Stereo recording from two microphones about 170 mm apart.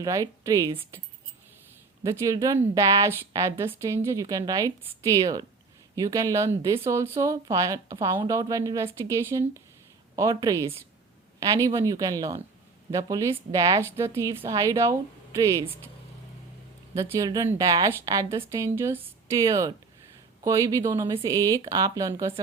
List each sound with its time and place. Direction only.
0.0 s a woman's voice: 20° right (ahead or behind)
2.0 s a woman's voice: 20° right (ahead or behind)
16.9 s a woman's voice: 20° right (ahead or behind)